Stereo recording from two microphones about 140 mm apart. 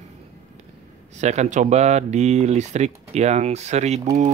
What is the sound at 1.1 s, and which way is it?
Speech, 55° right (ahead or behind).